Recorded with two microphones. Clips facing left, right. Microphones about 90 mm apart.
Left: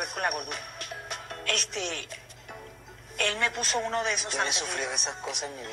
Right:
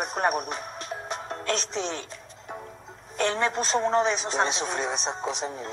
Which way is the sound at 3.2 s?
30° right (ahead or behind).